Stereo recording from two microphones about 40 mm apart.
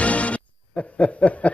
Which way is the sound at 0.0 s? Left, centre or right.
Left.